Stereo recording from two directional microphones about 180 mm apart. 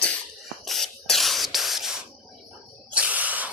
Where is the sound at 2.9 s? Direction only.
10° right (ahead or behind).